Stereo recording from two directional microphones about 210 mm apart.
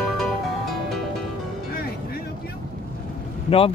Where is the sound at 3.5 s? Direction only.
30° left (ahead or behind).